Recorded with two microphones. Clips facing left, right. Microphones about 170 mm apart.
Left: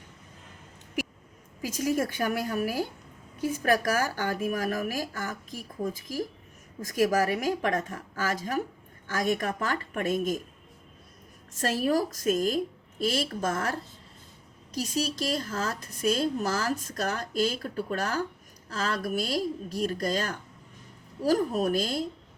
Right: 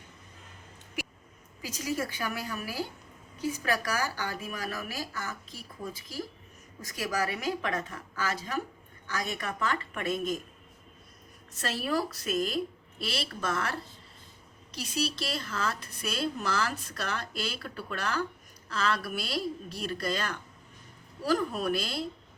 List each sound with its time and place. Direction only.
1.6 s a woman's voice: 50° left (ahead or behind)
11.6 s a woman's voice: 45° left (ahead or behind)